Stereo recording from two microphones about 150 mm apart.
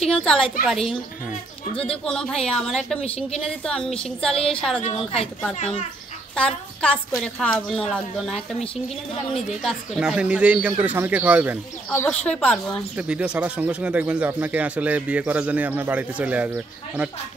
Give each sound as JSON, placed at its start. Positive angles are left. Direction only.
{"t": 0.2, "sound": "a woman's voice", "side_deg": 5}
{"t": 2.0, "sound": "a woman's voice", "side_deg": 5}
{"t": 4.4, "sound": "a woman's voice", "side_deg": 40}
{"t": 6.3, "sound": "a woman's voice", "side_deg": 5}
{"t": 9.6, "sound": "speech", "side_deg": 0}
{"t": 12.1, "sound": "speech", "side_deg": 10}
{"t": 12.9, "sound": "speech", "side_deg": -5}